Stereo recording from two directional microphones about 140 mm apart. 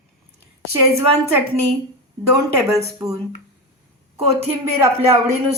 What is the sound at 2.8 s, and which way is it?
Speech, 20° right (ahead or behind).